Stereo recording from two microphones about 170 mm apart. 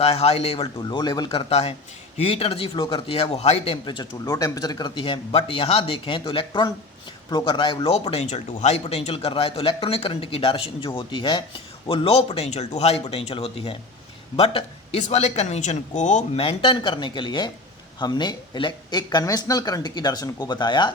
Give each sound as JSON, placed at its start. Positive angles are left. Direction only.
{"t": 0.0, "sound": "speech", "side_deg": 35}
{"t": 4.1, "sound": "speech", "side_deg": 20}